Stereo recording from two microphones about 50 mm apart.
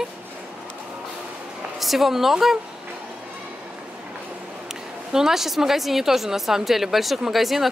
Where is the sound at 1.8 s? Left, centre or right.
Centre.